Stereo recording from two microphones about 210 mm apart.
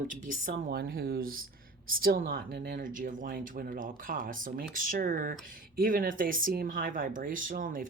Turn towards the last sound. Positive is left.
turn(degrees=-40)  # may be behind; listen again after turning